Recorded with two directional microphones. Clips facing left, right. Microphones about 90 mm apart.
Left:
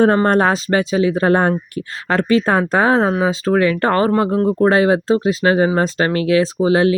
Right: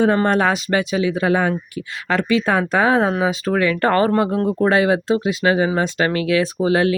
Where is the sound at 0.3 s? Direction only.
35° left (ahead or behind).